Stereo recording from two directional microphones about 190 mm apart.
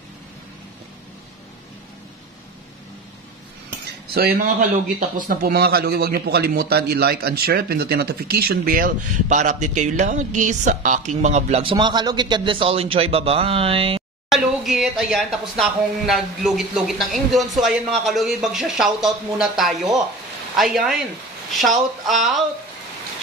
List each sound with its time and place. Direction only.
3.8 s a man's voice: 55° right (ahead or behind); by 11.7 s 35° right (ahead or behind)
11.7 s a man's voice: 20° right (ahead or behind)
14.3 s speech: centre (ahead or behind)